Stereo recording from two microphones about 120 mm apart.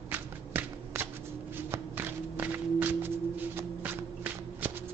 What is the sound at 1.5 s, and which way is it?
Walk, 15° right (ahead or behind).